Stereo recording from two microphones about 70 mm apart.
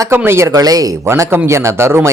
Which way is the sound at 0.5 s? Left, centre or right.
Right.